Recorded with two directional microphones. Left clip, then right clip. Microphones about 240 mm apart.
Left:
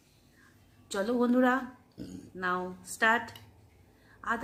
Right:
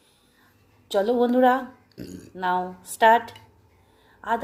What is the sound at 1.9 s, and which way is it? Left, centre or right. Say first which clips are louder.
Speech: right 6 dB; right.